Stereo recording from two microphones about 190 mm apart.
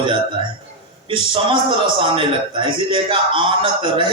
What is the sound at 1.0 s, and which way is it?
A man's voice, 25° right (ahead or behind).